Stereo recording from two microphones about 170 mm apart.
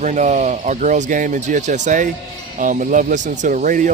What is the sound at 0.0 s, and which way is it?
Speech, 45° right (ahead or behind).